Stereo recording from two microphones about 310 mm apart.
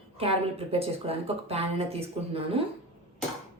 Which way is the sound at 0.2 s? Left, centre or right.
Centre.